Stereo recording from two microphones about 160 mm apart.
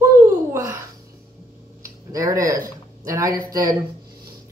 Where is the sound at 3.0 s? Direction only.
20° right (ahead or behind).